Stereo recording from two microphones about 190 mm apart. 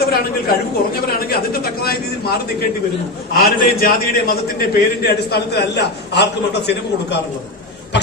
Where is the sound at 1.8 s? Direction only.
55° left (ahead or behind).